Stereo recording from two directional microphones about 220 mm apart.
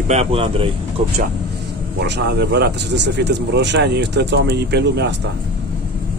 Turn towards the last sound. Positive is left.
turn(degrees=-50)  # may be behind; listen again after turning